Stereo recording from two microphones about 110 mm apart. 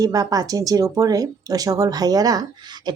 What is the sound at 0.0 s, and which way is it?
Speech, 35° right (ahead or behind).